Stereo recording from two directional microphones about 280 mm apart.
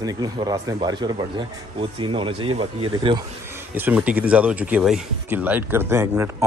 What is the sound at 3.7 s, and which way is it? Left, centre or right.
Speech, centre.